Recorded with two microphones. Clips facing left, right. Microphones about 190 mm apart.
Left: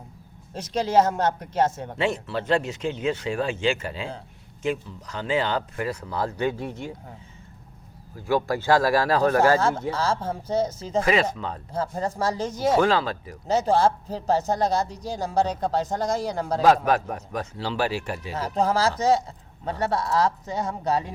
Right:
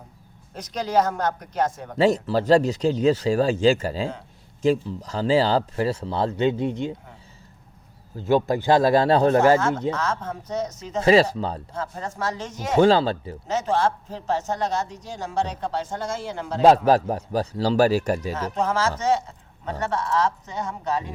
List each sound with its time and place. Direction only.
0.5 s speech: 25° left (ahead or behind)
2.0 s speech: 40° right (ahead or behind); by 6.9 s 20° right (ahead or behind)
8.1 s speech: 20° right (ahead or behind)
9.6 s a man's voice: 30° left (ahead or behind)
11.0 s speech: 35° right (ahead or behind)
11.7 s a man's voice: 35° left (ahead or behind)
12.8 s speech: 30° right (ahead or behind)
13.5 s a man's voice: 35° left (ahead or behind)
16.6 s speech: 30° right (ahead or behind)
18.3 s a man's voice: 35° left (ahead or behind)